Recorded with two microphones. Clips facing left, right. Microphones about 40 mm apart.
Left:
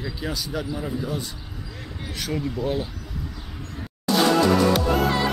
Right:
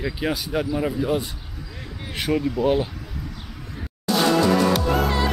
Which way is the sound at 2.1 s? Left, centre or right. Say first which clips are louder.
Right 5 dB; right.